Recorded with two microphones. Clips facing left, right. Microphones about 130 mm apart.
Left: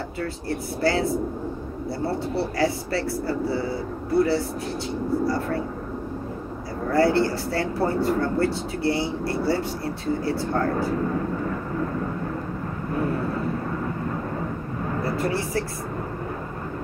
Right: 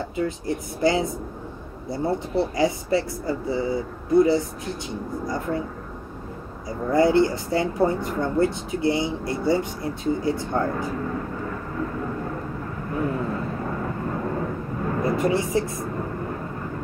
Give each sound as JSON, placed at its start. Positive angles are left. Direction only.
{"t": 0.2, "sound": "speech", "side_deg": -20}
{"t": 6.9, "sound": "speech", "side_deg": -20}
{"t": 15.0, "sound": "a sound", "side_deg": -20}